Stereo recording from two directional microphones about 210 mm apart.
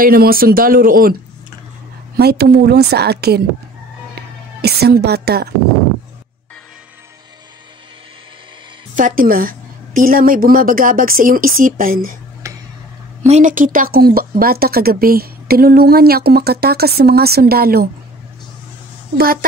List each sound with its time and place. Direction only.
0.0 s a woman's voice: 45° right (ahead or behind)
2.1 s a woman's voice: 50° right (ahead or behind)
4.6 s a woman's voice: 50° right (ahead or behind)
8.9 s a woman's voice: 40° right (ahead or behind)
12.4 s tick-tock: 15° right (ahead or behind)
13.2 s a woman's voice: 35° right (ahead or behind)